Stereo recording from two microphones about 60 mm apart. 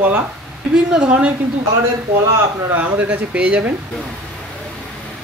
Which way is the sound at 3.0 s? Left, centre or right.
Right.